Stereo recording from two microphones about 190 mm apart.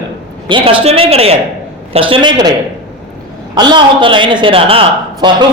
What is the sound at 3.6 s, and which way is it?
A man's voice, 25° right (ahead or behind).